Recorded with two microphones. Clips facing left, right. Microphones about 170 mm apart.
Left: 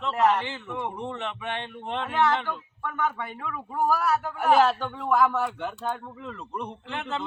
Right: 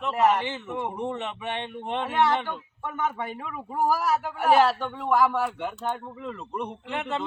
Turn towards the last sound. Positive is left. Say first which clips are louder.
# right 2 dB
turn(degrees=-5)  # may be behind; listen again after turning